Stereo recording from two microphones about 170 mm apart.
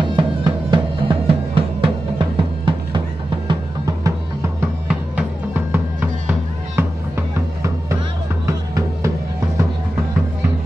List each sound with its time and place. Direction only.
0.0 s music: 25° right (ahead or behind)